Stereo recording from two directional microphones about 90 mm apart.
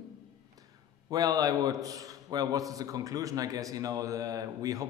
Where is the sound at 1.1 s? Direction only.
45° right (ahead or behind).